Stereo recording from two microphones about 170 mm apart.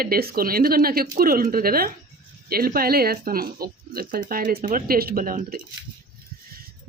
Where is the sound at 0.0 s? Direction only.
60° right (ahead or behind).